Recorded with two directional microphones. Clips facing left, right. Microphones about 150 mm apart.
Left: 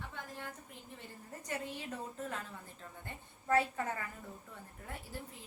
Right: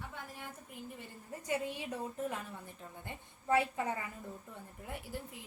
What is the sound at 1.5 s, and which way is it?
A woman's voice, 10° right (ahead or behind).